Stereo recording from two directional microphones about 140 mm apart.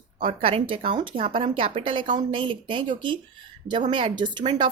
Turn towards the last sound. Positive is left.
turn(degrees=-35)  # may be behind; listen again after turning